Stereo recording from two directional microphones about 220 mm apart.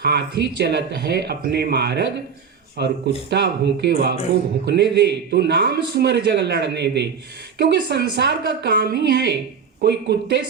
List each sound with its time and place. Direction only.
0.0 s a man's voice: 45° right (ahead or behind)